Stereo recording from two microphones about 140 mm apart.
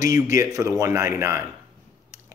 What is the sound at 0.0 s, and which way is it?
Speech, 25° right (ahead or behind).